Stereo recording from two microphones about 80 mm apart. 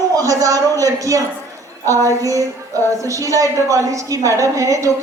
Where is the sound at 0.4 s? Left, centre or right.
Right.